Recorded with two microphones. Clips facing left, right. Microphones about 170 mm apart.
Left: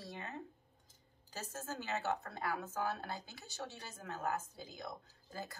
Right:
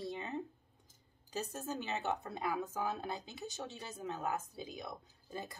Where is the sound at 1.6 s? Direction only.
20° right (ahead or behind).